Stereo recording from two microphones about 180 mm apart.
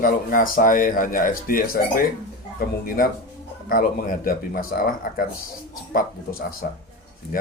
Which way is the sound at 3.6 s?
50° left (ahead or behind).